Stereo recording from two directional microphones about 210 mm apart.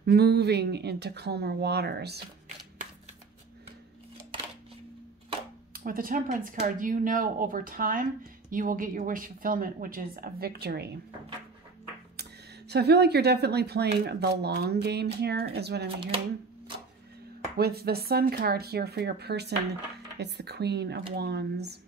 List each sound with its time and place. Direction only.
0.0 s speech: 50° right (ahead or behind)
5.7 s speech: 40° right (ahead or behind)
12.2 s speech: 50° right (ahead or behind)
17.6 s speech: 50° right (ahead or behind)